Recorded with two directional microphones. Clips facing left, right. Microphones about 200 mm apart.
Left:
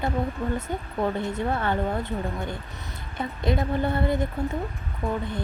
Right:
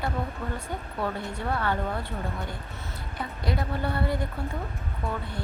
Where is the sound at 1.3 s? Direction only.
20° left (ahead or behind).